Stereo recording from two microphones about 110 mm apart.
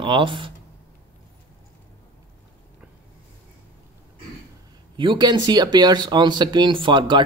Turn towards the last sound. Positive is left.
turn(degrees=-45)  # may be behind; listen again after turning